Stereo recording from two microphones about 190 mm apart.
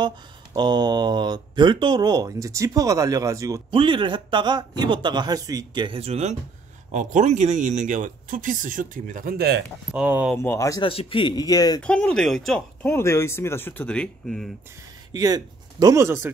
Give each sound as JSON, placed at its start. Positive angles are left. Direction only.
{"t": 0.0, "sound": "speech", "side_deg": -25}
{"t": 9.9, "sound": "speech", "side_deg": -5}
{"t": 10.4, "sound": "speech", "side_deg": 15}
{"t": 10.8, "sound": "speech", "side_deg": 30}
{"t": 11.8, "sound": "speech", "side_deg": 5}
{"t": 15.1, "sound": "speech", "side_deg": -20}